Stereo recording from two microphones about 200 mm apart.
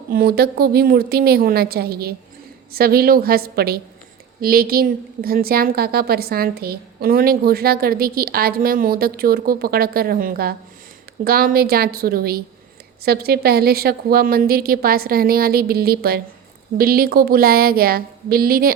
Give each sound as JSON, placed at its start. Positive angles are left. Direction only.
{"t": 0.1, "sound": "a woman's voice", "side_deg": -50}